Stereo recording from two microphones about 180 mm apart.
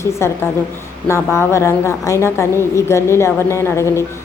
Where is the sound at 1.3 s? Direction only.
15° left (ahead or behind).